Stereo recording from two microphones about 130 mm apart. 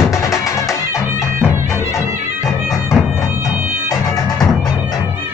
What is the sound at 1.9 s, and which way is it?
Music, 25° left (ahead or behind).